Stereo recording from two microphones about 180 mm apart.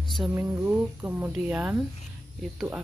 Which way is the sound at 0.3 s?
15° right (ahead or behind).